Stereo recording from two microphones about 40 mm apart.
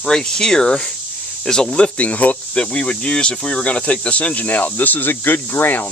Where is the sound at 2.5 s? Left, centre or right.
Left.